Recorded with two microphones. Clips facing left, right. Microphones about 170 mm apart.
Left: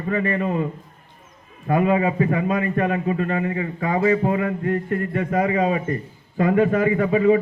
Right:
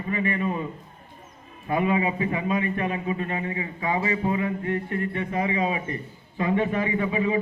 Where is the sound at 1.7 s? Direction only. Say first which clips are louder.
Left 5 dB; 45° left (ahead or behind).